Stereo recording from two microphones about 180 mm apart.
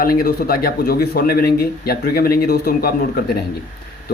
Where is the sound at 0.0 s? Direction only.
55° left (ahead or behind).